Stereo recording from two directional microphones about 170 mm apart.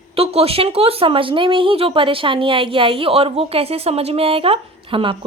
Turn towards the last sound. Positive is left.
turn(degrees=-30)  # may be behind; listen again after turning